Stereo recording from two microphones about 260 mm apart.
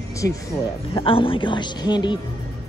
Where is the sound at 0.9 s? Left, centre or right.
Centre.